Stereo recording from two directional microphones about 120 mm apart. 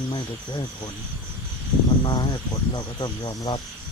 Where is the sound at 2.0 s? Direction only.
40° left (ahead or behind).